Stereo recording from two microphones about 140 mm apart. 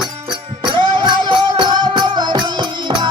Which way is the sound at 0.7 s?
30° right (ahead or behind).